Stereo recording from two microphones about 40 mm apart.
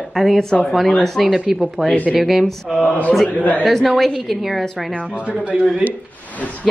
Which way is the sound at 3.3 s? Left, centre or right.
Left.